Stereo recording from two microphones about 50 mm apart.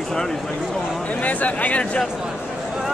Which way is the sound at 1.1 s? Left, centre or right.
Left.